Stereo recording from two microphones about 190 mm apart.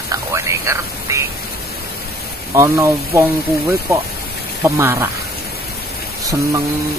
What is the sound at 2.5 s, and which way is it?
Speech, 15° right (ahead or behind).